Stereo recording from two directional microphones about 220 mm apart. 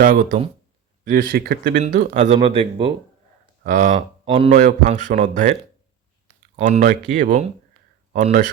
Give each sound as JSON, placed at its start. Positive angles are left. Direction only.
{"t": 0.0, "sound": "speech", "side_deg": -35}
{"t": 2.1, "sound": "speech", "side_deg": -30}
{"t": 3.6, "sound": "speech", "side_deg": -40}
{"t": 4.3, "sound": "speech", "side_deg": -25}
{"t": 4.5, "sound": "speech", "side_deg": -35}
{"t": 6.6, "sound": "speech", "side_deg": -35}